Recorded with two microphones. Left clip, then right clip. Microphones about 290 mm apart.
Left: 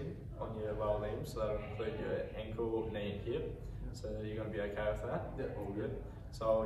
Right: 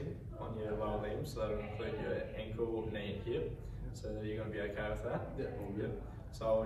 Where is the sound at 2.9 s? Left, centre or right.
Centre.